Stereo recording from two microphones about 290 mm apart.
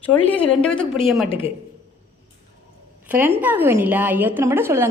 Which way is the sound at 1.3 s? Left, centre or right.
Centre.